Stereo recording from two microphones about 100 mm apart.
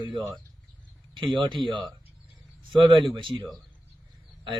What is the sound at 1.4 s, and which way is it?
Speech, 55° right (ahead or behind).